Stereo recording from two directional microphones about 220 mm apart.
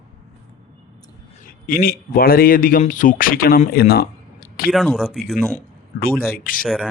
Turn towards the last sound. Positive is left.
turn(degrees=40)  # may be behind; listen again after turning